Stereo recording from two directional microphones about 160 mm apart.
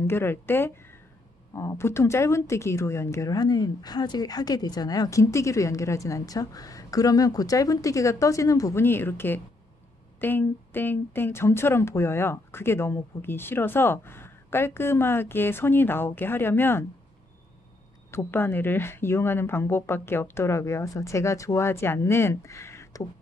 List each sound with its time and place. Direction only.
0.0 s speech: 15° left (ahead or behind)
18.1 s speech: 15° left (ahead or behind)